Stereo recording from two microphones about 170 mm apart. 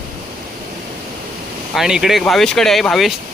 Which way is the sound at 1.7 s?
Centre (ahead or behind).